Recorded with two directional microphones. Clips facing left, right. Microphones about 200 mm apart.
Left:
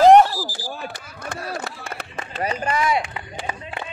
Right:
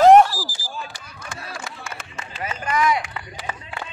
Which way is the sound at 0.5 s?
60° left (ahead or behind).